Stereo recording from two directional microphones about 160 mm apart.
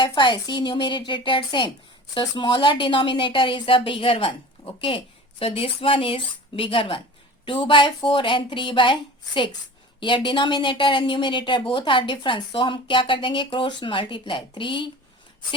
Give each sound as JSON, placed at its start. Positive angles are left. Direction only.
{"t": 0.2, "sound": "a woman's voice", "side_deg": 30}